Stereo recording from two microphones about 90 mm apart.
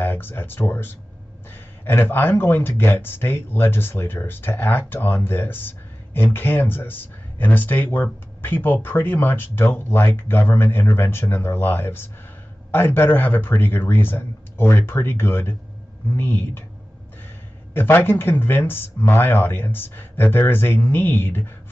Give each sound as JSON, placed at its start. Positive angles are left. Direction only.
{"t": 0.0, "sound": "speech", "side_deg": 25}
{"t": 17.7, "sound": "speech", "side_deg": 25}